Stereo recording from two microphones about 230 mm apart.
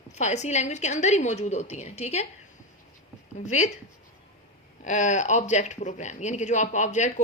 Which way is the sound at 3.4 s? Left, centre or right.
Left.